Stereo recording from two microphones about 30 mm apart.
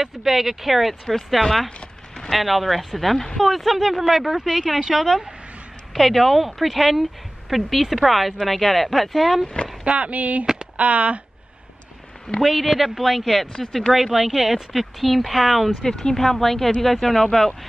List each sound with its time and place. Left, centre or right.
0.0 s speech: centre
1.4 s a woman's voice: centre
4.9 s a woman's voice: centre
9.8 s speech: right
12.4 s a woman's voice: centre
15.8 s speech: left
16.2 s speech: centre